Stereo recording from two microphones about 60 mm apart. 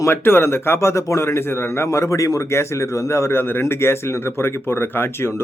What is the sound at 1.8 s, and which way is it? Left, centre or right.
Speech, left.